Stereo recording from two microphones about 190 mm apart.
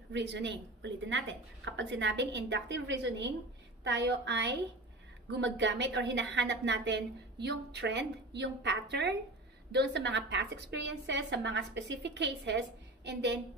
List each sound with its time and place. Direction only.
0.1 s a woman's voice: 65° right (ahead or behind)